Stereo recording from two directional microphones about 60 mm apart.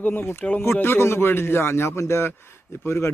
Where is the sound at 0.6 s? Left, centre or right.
Left.